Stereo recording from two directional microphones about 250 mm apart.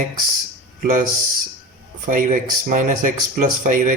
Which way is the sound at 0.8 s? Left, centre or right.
Right.